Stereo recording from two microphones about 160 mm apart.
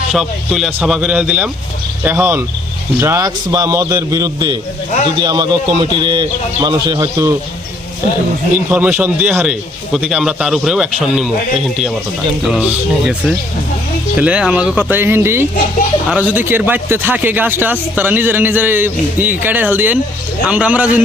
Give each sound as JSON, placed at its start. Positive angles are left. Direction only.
{"t": 0.1, "sound": "a man's voice", "side_deg": 0}
{"t": 8.5, "sound": "a man's voice", "side_deg": -10}